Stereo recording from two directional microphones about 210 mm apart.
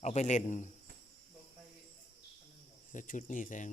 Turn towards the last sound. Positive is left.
turn(degrees=40)  # may be behind; listen again after turning